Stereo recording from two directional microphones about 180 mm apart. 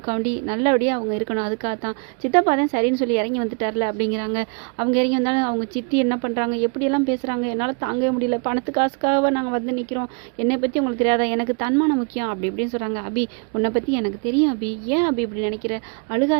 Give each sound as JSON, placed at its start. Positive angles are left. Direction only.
{"t": 0.0, "sound": "a woman's voice", "side_deg": -35}